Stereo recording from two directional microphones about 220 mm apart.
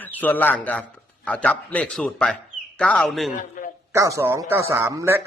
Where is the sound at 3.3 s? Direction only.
35° left (ahead or behind).